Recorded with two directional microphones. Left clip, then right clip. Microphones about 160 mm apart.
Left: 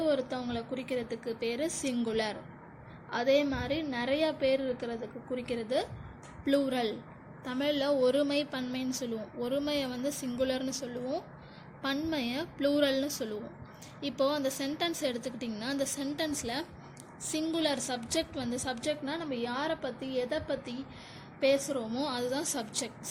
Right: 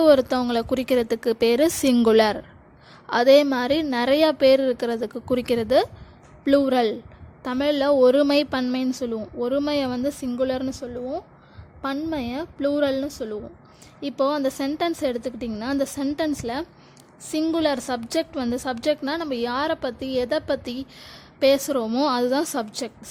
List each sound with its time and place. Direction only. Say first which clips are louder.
0.0 s a woman's voice: right 14 dB; 55° right (ahead or behind)